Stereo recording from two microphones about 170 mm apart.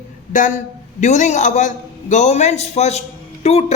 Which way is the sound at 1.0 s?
45° left (ahead or behind).